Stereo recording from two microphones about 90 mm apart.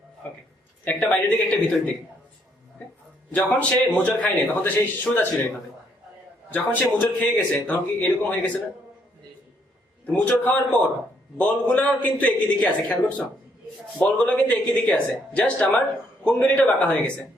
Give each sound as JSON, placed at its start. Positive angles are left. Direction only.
{"t": 0.2, "sound": "speech", "side_deg": 15}
{"t": 3.3, "sound": "a man's voice", "side_deg": 15}
{"t": 10.1, "sound": "speech", "side_deg": 15}